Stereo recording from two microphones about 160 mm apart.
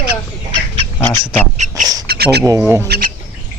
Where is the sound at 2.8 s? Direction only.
90° right.